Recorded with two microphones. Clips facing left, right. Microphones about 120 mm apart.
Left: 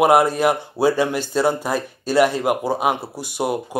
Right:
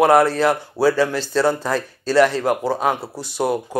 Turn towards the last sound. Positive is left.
turn(degrees=15)  # may be behind; listen again after turning